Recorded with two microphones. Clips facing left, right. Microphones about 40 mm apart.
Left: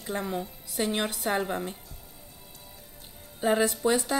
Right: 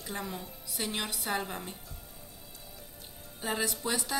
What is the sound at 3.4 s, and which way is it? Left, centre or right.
Speech, left.